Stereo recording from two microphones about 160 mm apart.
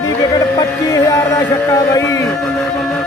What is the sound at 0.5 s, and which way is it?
Music, 20° left (ahead or behind).